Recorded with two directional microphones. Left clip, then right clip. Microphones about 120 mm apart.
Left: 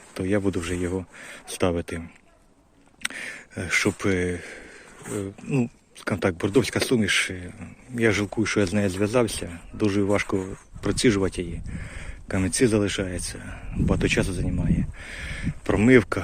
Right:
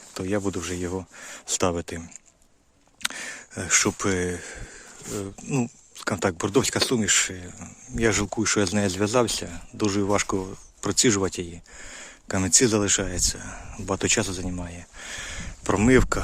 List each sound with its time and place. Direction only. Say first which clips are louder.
0.1 s speech: left 2 dB; 20° right (ahead or behind)